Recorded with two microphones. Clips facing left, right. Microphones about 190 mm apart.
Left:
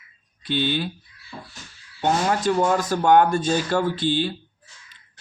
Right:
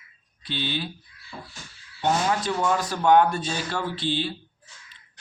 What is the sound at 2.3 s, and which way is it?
Speech, 45° left (ahead or behind).